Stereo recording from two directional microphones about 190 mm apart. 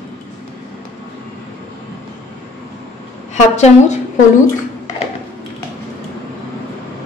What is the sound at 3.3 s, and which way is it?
Speech, 35° left (ahead or behind).